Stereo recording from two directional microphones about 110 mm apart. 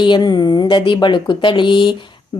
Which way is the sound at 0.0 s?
45° left (ahead or behind).